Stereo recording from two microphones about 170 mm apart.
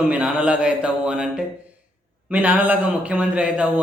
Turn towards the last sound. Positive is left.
turn(degrees=-5)  # may be behind; listen again after turning